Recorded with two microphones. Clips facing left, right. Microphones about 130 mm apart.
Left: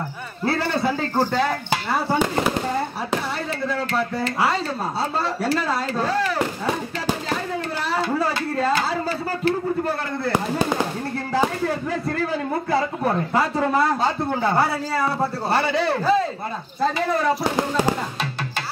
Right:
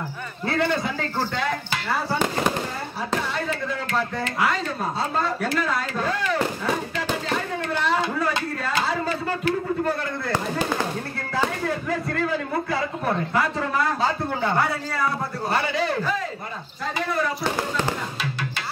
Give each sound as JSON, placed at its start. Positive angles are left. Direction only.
{"t": 0.5, "sound": "a man's voice", "side_deg": 35}
{"t": 4.2, "sound": "a man's voice", "side_deg": 30}
{"t": 13.3, "sound": "speech", "side_deg": 30}
{"t": 15.5, "sound": "a man's voice", "side_deg": 30}